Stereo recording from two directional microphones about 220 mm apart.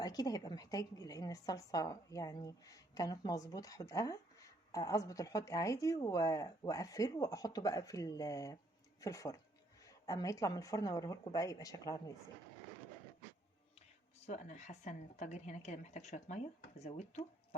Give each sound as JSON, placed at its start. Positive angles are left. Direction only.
{"t": 0.0, "sound": "a woman's voice", "side_deg": 15}
{"t": 14.2, "sound": "speech", "side_deg": 30}